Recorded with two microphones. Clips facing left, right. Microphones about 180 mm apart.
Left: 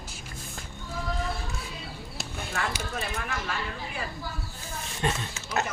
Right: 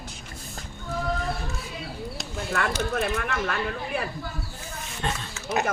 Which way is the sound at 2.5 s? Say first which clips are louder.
Right 6 dB; 60° right (ahead or behind).